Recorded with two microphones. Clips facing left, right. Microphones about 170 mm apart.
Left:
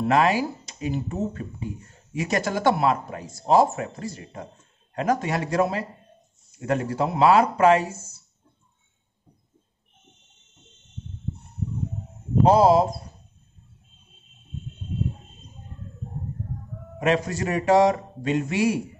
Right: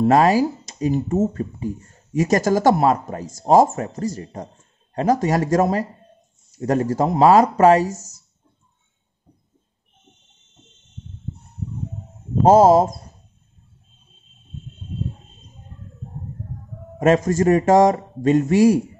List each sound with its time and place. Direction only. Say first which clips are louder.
0.0 s speech: right 6 dB; 40° right (ahead or behind)
12.4 s a man's voice: right 5 dB; 45° right (ahead or behind)
17.0 s a man's voice: right 7 dB; 45° right (ahead or behind)